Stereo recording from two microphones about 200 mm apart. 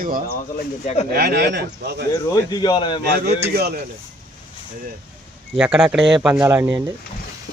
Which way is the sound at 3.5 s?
50° right (ahead or behind).